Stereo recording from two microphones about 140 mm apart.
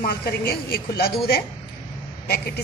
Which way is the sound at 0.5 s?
90° left.